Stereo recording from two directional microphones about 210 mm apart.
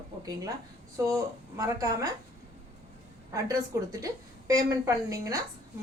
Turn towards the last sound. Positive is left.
turn(degrees=-15)  # may be behind; listen again after turning